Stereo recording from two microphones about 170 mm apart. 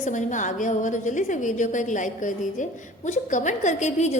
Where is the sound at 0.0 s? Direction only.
45° left (ahead or behind).